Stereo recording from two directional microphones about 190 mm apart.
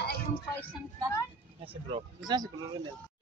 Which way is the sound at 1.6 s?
30° right (ahead or behind).